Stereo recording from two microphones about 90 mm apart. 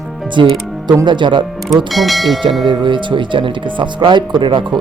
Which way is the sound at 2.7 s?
65° right (ahead or behind).